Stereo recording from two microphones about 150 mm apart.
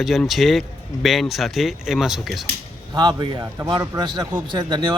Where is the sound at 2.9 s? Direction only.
30° right (ahead or behind).